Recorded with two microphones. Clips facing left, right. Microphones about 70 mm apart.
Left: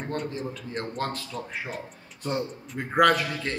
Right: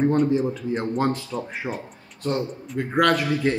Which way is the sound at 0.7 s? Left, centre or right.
Centre.